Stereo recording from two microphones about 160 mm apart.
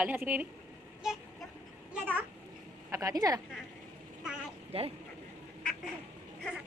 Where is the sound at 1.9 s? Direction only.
10° right (ahead or behind).